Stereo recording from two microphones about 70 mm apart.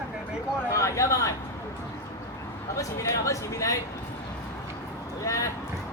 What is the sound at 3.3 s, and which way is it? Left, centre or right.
Speech, left.